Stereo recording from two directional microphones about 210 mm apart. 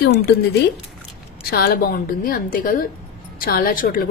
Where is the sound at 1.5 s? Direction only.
45° left (ahead or behind).